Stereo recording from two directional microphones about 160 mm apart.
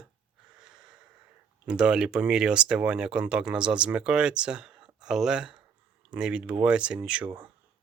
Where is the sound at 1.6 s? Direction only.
5° right (ahead or behind).